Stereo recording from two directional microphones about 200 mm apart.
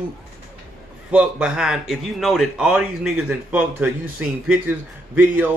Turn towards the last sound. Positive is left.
turn(degrees=-10)  # may be behind; listen again after turning